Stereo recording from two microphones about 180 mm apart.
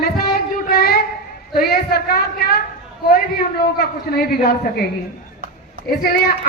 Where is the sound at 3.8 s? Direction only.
60° left (ahead or behind).